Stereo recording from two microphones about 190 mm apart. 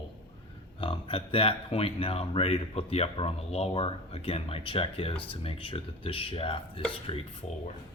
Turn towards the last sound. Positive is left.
turn(degrees=30)  # may be behind; listen again after turning